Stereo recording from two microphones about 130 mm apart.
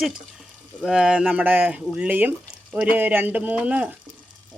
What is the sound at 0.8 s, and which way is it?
Speech, 5° right (ahead or behind).